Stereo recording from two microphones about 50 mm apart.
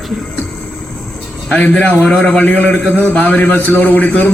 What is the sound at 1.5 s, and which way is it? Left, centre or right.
Speech, left.